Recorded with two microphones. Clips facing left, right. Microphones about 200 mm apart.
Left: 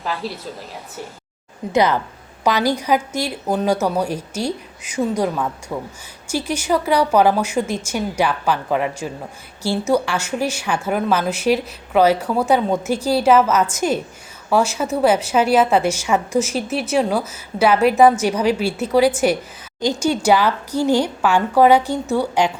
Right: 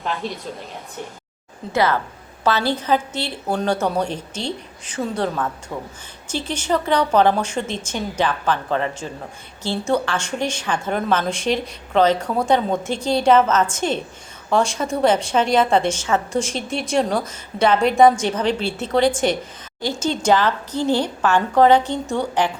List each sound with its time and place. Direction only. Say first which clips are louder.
0.0 s a woman's voice: even; 5° left (ahead or behind)
1.7 s a woman's voice: left 2 dB; 20° left (ahead or behind)